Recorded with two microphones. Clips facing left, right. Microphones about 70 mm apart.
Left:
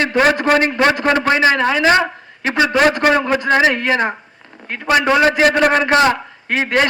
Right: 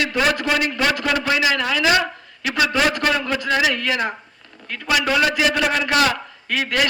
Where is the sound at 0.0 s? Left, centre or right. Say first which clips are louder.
Left 6 dB; left.